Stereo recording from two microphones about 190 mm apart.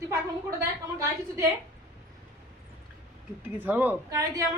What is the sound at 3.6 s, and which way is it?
Speech, 10° right (ahead or behind).